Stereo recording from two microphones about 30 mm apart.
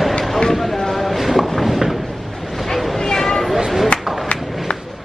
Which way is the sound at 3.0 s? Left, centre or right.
Centre.